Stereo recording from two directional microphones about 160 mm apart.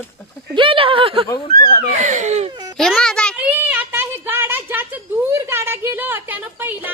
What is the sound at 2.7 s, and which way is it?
Speech, 5° left (ahead or behind).